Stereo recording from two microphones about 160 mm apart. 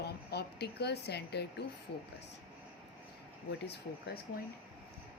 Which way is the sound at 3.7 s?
90° left.